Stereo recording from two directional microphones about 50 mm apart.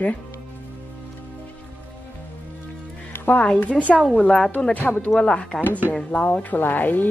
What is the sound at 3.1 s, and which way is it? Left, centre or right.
Music, left.